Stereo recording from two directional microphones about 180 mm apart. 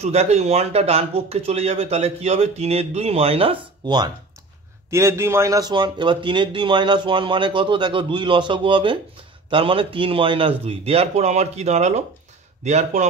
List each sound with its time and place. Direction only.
0.0 s speech: 35° right (ahead or behind)